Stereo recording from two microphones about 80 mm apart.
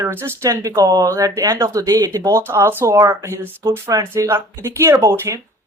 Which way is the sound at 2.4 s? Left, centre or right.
Right.